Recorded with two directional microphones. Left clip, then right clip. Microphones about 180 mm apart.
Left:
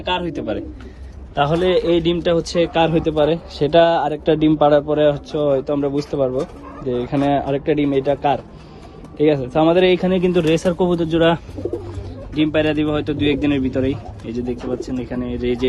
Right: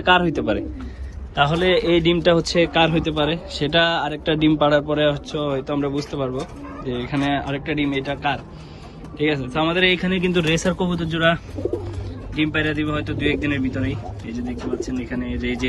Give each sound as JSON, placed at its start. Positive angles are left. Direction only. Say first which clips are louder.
{"t": 0.1, "sound": "a man's voice", "louder": "right 5 dB", "side_deg": 0}
{"t": 1.4, "sound": "a man's voice", "louder": "left 1 dB", "side_deg": 20}